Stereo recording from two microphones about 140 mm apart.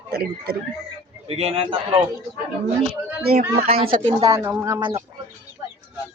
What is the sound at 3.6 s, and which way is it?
Speech, 45° right (ahead or behind).